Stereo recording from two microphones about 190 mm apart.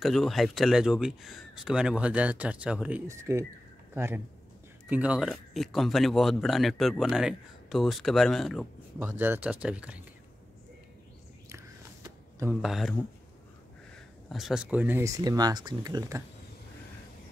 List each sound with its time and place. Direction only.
0.0 s speech: centre (ahead or behind)
9.0 s speech: 10° right (ahead or behind)
11.4 s whispering: 15° right (ahead or behind)
12.6 s speech: centre (ahead or behind)
14.3 s speech: centre (ahead or behind); by 16.2 s 20° right (ahead or behind)